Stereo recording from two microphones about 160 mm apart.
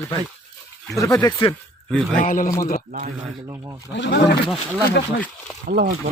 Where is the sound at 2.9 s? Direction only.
60° right (ahead or behind).